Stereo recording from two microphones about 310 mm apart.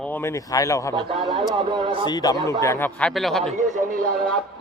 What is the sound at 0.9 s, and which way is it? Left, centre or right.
Speech, centre.